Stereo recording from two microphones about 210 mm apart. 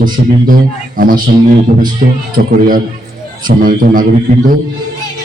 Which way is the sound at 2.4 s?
45° right (ahead or behind).